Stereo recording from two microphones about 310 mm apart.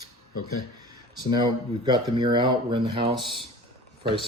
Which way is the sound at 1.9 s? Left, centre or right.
Centre.